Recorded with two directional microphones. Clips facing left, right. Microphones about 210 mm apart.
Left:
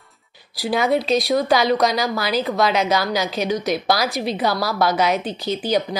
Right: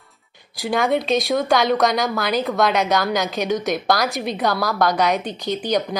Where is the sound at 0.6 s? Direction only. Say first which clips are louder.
Left 1 dB; 5° left (ahead or behind).